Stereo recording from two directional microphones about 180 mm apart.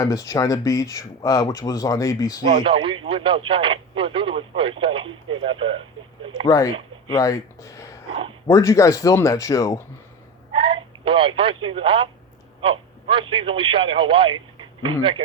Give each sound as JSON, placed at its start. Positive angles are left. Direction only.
{"t": 0.0, "sound": "speech", "side_deg": 20}
{"t": 2.4, "sound": "speech", "side_deg": -30}
{"t": 6.5, "sound": "speech", "side_deg": 20}
{"t": 10.5, "sound": "telephone", "side_deg": -25}
{"t": 12.6, "sound": "a man's voice", "side_deg": -30}